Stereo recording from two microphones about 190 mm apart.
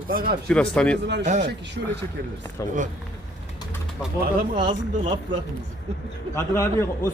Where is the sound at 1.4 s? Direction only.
65° right (ahead or behind).